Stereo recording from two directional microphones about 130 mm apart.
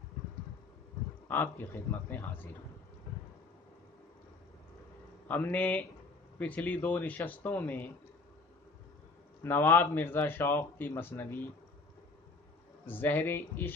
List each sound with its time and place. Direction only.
1.3 s a man's voice: 15° left (ahead or behind)
5.3 s a man's voice: 15° left (ahead or behind)
9.4 s a man's voice: 15° left (ahead or behind)
12.8 s a man's voice: 15° left (ahead or behind)